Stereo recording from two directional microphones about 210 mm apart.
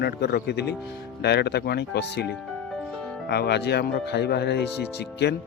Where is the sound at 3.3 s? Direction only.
50° left (ahead or behind).